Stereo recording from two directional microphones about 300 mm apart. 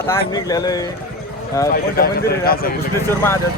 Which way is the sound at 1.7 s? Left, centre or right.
Left.